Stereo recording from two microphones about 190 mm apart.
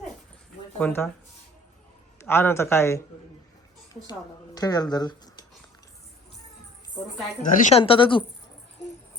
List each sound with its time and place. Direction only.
0.8 s speech: 5° left (ahead or behind)
2.2 s speech: 10° left (ahead or behind)
4.5 s speech: 20° left (ahead or behind)
7.5 s speech: 35° left (ahead or behind)